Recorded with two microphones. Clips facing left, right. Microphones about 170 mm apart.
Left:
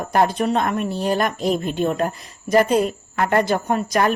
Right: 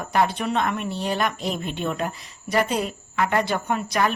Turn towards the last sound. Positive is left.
turn(degrees=45)  # may be behind; listen again after turning